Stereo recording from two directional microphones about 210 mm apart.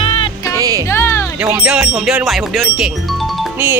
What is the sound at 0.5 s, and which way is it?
Music, 15° right (ahead or behind).